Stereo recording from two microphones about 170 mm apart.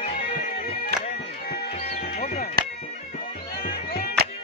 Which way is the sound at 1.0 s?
65° left (ahead or behind).